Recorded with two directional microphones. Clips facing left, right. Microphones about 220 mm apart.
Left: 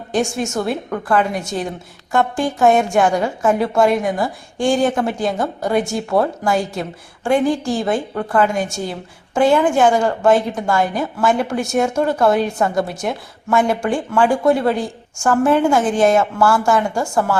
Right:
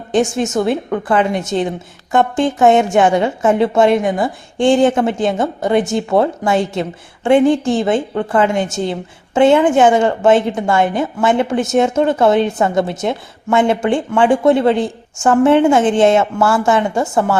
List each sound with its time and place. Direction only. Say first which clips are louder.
0.1 s speech: right 4 dB; 20° right (ahead or behind)